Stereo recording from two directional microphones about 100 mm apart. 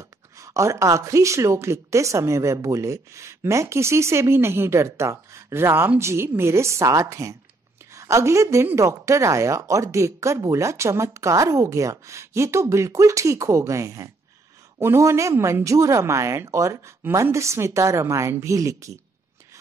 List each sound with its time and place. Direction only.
0.4 s a woman's voice: 30° right (ahead or behind)